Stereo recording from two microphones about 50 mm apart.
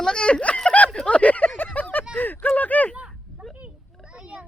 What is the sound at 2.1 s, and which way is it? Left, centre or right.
Speech, left.